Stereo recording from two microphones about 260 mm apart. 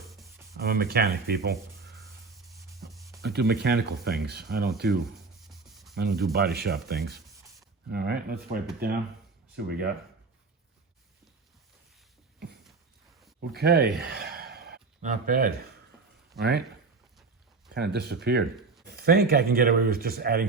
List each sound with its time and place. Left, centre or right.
0.1 s a sound: centre
0.6 s speech: right
3.2 s speech: right
5.9 s speech: right
13.4 s speech: right
14.0 s gasp: right
16.3 s speech: right
17.7 s speech: right